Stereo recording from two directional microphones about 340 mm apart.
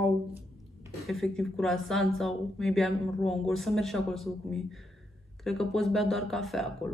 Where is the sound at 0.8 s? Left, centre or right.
Centre.